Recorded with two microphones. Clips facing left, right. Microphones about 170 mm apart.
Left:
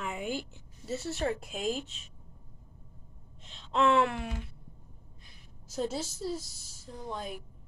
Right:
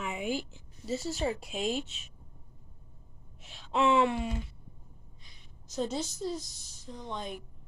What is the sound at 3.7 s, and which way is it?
A woman's voice, centre (ahead or behind).